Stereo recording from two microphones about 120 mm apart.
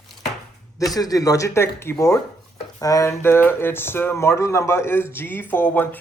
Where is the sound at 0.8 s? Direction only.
30° left (ahead or behind).